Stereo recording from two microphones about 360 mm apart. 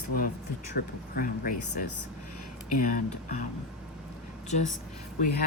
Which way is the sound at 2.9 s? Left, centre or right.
Left.